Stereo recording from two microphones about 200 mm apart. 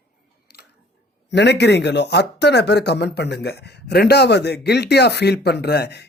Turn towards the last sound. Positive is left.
turn(degrees=55)  # may be behind; listen again after turning